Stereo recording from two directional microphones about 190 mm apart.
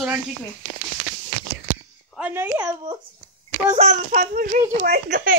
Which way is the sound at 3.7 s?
35° right (ahead or behind).